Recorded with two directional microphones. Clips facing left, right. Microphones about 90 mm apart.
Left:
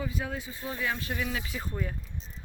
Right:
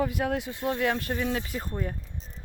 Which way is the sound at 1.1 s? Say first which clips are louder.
Right 4 dB; 40° right (ahead or behind).